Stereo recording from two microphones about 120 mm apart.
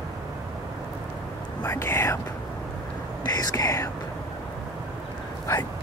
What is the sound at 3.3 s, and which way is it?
Speech, 30° left (ahead or behind).